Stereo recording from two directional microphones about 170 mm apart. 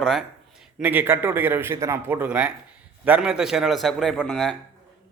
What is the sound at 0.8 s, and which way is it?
A man's voice, 10° right (ahead or behind).